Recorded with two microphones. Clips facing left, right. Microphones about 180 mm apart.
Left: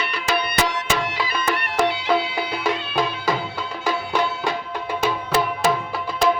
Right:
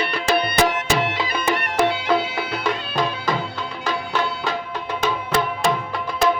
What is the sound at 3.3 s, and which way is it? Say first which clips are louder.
Music: even; 10° left (ahead or behind).